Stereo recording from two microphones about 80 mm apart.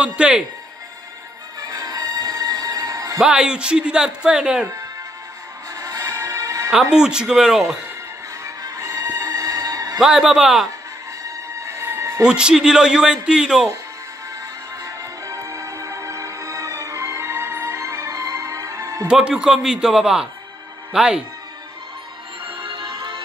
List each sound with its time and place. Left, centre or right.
0.0 s speech: centre
1.6 s music: right
3.2 s speech: centre
5.8 s music: right
6.7 s speech: centre
8.5 s music: right
9.9 s speech: centre
11.2 s music: right
12.2 s speech: centre
14.8 s music: right
19.0 s speech: centre
22.6 s music: right